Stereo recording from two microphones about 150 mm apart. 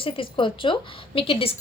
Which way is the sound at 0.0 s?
35° left (ahead or behind).